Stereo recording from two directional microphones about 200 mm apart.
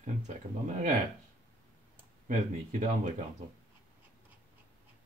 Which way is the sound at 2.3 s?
35° right (ahead or behind).